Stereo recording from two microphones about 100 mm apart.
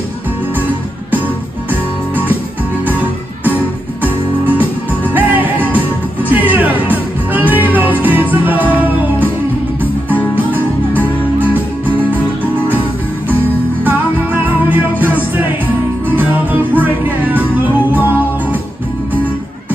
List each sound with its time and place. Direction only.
1.1 s music: 20° right (ahead or behind)
3.4 s music: 15° right (ahead or behind)
13.8 s music: 20° right (ahead or behind)
16.8 s music: 20° right (ahead or behind)